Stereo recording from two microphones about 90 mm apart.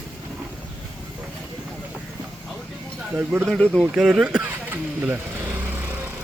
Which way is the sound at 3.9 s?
5° right (ahead or behind).